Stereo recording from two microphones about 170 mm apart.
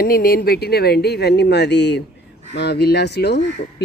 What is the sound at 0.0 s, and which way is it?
Speech, 60° left (ahead or behind).